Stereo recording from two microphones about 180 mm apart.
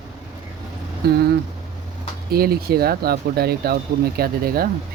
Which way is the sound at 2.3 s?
55° right (ahead or behind).